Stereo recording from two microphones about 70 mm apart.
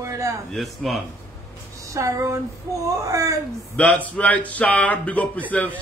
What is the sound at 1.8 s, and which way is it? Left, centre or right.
Speech, right.